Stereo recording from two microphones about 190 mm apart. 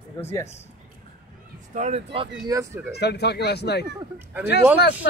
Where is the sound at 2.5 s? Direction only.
15° right (ahead or behind).